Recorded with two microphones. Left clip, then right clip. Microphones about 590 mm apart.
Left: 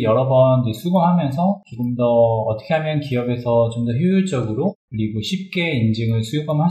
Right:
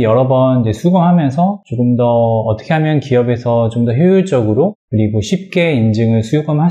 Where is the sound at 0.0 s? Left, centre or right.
Right.